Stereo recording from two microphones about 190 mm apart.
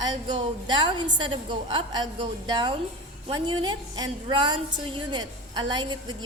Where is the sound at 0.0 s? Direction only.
25° right (ahead or behind).